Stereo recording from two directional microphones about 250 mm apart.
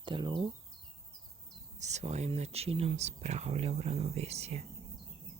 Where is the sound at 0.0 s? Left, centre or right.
Centre.